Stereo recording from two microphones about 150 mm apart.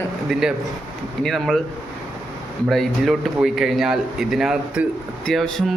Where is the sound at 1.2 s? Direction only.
Centre (ahead or behind).